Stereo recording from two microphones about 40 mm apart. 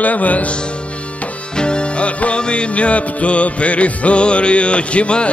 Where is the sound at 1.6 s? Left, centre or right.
Left.